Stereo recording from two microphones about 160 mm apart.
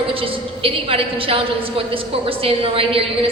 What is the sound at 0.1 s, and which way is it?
A woman's voice, 35° right (ahead or behind).